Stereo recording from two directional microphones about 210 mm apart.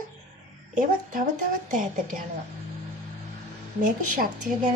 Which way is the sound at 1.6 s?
40° right (ahead or behind).